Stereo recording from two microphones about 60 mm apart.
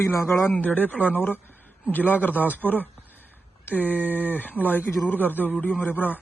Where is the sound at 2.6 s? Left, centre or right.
Right.